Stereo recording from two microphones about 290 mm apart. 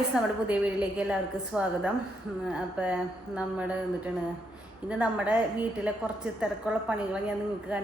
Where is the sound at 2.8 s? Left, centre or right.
Centre.